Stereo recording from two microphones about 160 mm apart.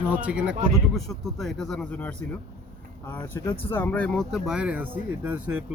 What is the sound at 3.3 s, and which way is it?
Speech, 15° left (ahead or behind).